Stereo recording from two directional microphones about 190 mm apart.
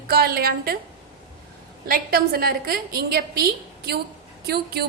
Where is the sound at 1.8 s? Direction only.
50° right (ahead or behind).